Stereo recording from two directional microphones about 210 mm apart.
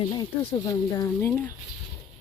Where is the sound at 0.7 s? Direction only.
15° left (ahead or behind).